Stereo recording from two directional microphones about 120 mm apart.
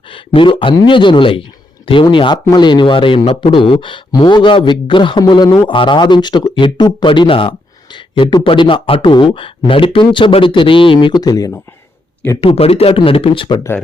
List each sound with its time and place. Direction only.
0.1 s speech: 45° left (ahead or behind)
12.4 s speech: 55° left (ahead or behind)